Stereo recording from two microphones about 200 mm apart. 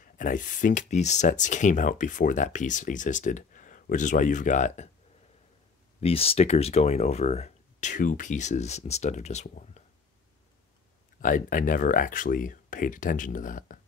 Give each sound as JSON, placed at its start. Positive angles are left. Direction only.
{"t": 0.0, "sound": "speech", "side_deg": 40}
{"t": 5.9, "sound": "speech", "side_deg": 30}
{"t": 11.1, "sound": "speech", "side_deg": 40}